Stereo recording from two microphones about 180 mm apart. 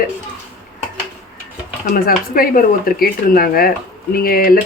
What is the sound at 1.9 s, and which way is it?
Speech, 55° left (ahead or behind).